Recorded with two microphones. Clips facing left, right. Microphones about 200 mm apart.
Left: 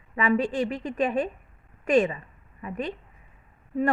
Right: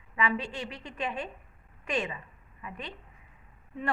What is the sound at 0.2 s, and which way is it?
A woman's voice, 45° left (ahead or behind).